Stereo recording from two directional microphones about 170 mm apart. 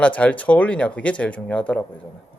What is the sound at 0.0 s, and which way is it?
Speech, 5° left (ahead or behind).